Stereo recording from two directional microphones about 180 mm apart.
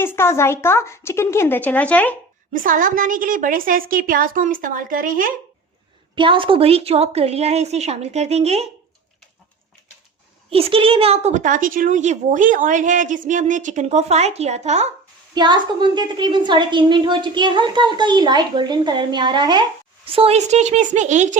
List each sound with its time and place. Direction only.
0.0 s speech: 15° left (ahead or behind)
2.5 s a woman's voice: 50° right (ahead or behind)
6.1 s a woman's voice: 30° right (ahead or behind)
10.5 s a woman's voice: 30° right (ahead or behind)
15.4 s a woman's voice: 25° right (ahead or behind); by 21.2 s 40° right (ahead or behind)